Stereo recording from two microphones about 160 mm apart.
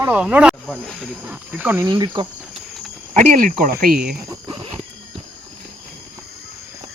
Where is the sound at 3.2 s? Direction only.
55° right (ahead or behind).